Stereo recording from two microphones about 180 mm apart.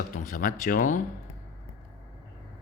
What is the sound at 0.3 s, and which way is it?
Speech, 50° left (ahead or behind).